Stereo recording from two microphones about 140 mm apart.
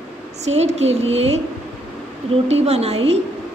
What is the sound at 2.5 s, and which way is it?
Speech, 50° right (ahead or behind).